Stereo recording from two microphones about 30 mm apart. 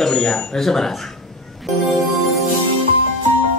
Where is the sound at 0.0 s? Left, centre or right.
Centre.